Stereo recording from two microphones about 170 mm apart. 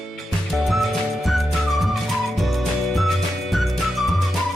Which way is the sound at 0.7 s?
Centre (ahead or behind).